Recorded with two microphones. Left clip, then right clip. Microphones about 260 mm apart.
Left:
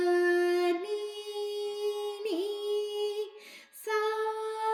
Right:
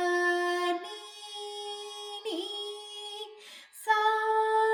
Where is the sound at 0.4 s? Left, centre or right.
Right.